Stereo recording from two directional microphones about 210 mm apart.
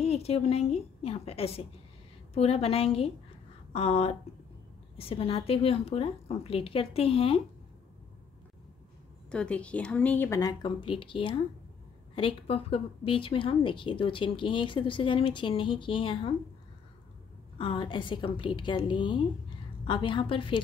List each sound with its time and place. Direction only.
0.0 s speech: 30° left (ahead or behind)
9.3 s speech: 5° left (ahead or behind); by 16.3 s 25° left (ahead or behind)
17.6 s speech: 25° left (ahead or behind)